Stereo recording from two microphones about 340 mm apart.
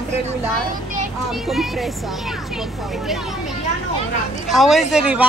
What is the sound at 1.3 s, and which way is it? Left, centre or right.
Speech, centre.